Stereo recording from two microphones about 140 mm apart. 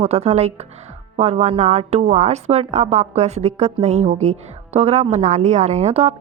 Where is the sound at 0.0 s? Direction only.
50° right (ahead or behind).